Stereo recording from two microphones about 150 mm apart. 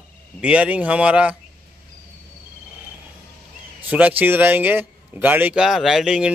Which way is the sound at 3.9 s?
10° right (ahead or behind).